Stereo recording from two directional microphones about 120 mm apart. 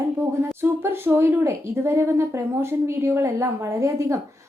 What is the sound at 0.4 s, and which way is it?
A woman's voice, 20° right (ahead or behind).